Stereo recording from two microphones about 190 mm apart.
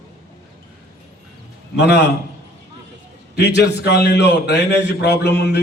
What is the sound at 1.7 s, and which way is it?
Speech, 60° left (ahead or behind).